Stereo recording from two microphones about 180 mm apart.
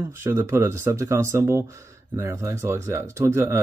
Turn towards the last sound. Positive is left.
turn(degrees=-15)  # may be behind; listen again after turning